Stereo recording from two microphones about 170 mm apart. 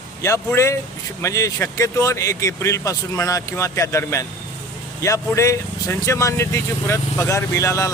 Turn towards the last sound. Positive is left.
turn(degrees=20)  # may be behind; listen again after turning